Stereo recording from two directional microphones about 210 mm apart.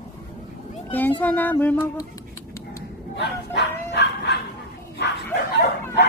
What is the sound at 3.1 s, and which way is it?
Speech, 55° left (ahead or behind).